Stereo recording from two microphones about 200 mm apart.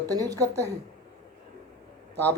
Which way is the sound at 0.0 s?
20° right (ahead or behind).